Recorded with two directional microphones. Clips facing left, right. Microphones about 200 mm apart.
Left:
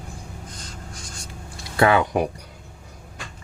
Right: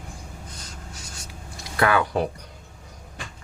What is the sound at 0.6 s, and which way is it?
Writing, 10° right (ahead or behind).